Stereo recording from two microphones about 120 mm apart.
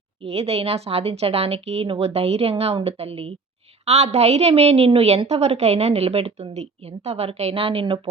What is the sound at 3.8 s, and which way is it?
A woman's voice, 65° right (ahead or behind).